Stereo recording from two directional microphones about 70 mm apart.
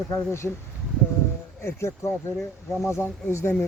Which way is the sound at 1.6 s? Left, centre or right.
Left.